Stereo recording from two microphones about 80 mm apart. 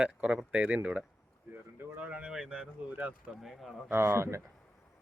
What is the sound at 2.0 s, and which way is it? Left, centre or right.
Speech, centre.